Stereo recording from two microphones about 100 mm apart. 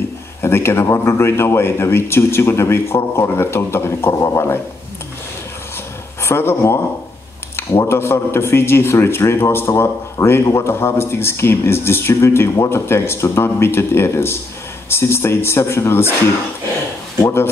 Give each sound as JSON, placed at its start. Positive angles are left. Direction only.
{"t": 0.4, "sound": "a man's voice", "side_deg": 25}
{"t": 6.2, "sound": "a man's voice", "side_deg": 25}
{"t": 17.2, "sound": "a man's voice", "side_deg": 25}